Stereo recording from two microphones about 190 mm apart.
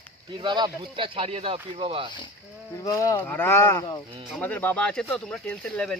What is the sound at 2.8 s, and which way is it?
Speech, 15° left (ahead or behind).